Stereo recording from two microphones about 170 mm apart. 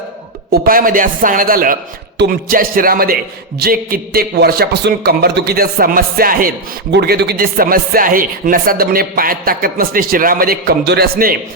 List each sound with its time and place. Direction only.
0.5 s speech: 55° right (ahead or behind)
6.9 s speech: 75° right (ahead or behind)